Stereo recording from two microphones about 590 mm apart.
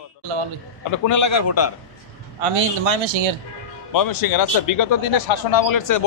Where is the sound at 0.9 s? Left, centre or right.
Left.